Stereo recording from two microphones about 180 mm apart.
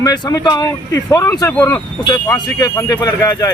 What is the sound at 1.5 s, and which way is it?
Speech, 10° left (ahead or behind).